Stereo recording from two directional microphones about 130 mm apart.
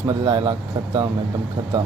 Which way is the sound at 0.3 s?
35° right (ahead or behind).